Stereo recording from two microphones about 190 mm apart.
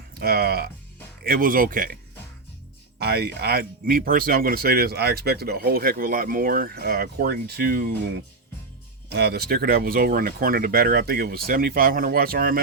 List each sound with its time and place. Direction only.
0.1 s speech: 55° right (ahead or behind)
3.0 s speech: 55° right (ahead or behind)
9.0 s speech: 55° right (ahead or behind)